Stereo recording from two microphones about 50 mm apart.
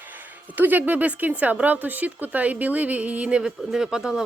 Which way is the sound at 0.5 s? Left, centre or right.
Right.